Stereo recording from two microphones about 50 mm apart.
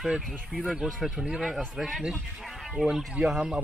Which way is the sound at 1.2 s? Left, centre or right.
Centre.